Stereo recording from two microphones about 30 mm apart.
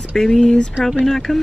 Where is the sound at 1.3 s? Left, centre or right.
Centre.